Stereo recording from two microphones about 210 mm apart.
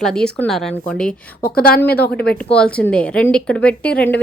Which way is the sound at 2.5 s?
5° left (ahead or behind).